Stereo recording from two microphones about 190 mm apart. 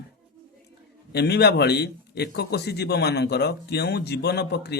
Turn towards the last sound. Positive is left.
turn(degrees=60)  # may be behind; listen again after turning